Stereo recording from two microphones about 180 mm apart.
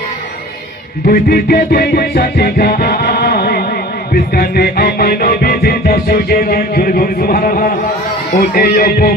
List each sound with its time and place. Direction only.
1.0 s music: 55° left (ahead or behind)